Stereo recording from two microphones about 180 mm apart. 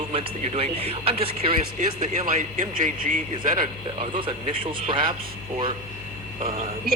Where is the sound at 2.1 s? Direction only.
50° right (ahead or behind).